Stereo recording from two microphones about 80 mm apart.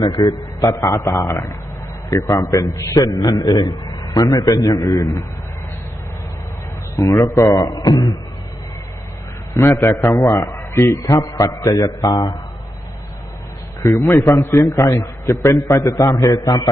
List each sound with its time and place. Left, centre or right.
0.0 s a man's voice: left
0.7 s a man's voice: left
6.9 s a man's voice: left
7.3 s a man's voice: left
7.5 s a man's voice: left
9.6 s a man's voice: left
13.8 s a man's voice: left
15.5 s a man's voice: left